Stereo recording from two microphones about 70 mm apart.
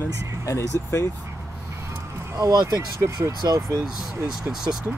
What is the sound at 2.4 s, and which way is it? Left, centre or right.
Speech, right.